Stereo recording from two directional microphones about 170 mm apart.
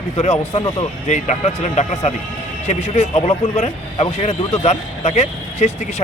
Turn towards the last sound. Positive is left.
turn(degrees=40)  # may be behind; listen again after turning